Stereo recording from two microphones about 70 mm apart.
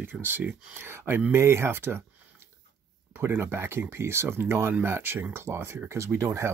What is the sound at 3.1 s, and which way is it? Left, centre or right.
Speech, right.